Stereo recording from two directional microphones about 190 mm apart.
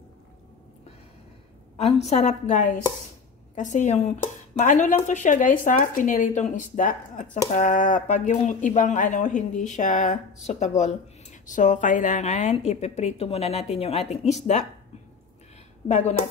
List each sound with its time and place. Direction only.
1.9 s speech: 35° left (ahead or behind)
15.9 s speech: 35° left (ahead or behind)